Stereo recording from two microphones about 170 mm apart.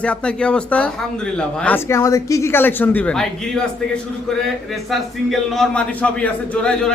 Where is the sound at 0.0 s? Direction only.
5° left (ahead or behind).